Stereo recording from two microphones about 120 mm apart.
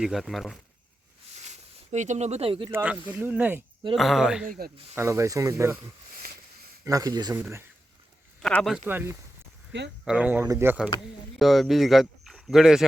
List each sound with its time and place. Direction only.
0.0 s speech: centre (ahead or behind)
1.5 s speech: 75° right (ahead or behind); by 2.6 s 50° right (ahead or behind)
2.6 s speech: 15° right (ahead or behind)
3.9 s speech: centre (ahead or behind)
4.9 s speech: 25° right (ahead or behind)
6.8 s speech: 30° right (ahead or behind)
7.3 s speech: 15° right (ahead or behind)
8.4 s speech: 5° left (ahead or behind)
8.7 s speech: 10° right (ahead or behind)
10.4 s speech: 25° right (ahead or behind)
11.3 s speech: centre (ahead or behind)